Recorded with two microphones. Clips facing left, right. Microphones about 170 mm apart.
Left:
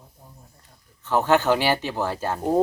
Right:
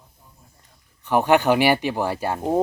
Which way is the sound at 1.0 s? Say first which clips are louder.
Right 2 dB; 15° right (ahead or behind).